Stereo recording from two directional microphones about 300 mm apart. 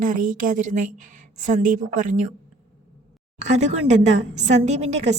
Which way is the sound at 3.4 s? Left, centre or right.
Right.